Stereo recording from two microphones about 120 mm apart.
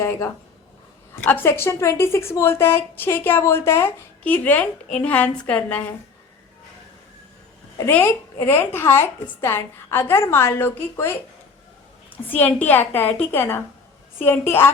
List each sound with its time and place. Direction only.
0.0 s a woman's voice: 20° left (ahead or behind)
7.9 s a woman's voice: 20° left (ahead or behind)